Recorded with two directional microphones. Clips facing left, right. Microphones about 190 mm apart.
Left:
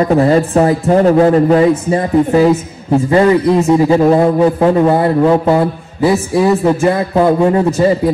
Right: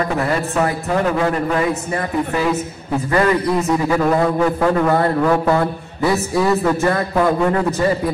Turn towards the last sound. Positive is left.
turn(degrees=25)  # may be behind; listen again after turning